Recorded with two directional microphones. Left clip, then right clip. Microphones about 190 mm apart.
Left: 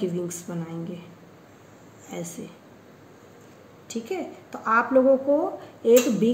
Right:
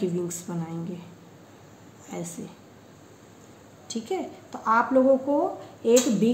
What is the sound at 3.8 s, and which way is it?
A child's voice, 15° right (ahead or behind).